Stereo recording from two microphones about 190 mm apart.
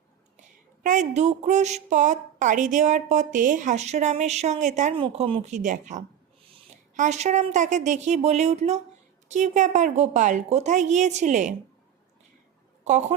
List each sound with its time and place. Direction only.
0.3 s speech: 40° right (ahead or behind)
12.8 s speech: 35° right (ahead or behind)